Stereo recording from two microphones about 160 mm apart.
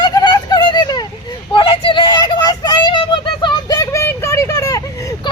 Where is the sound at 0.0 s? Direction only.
25° left (ahead or behind).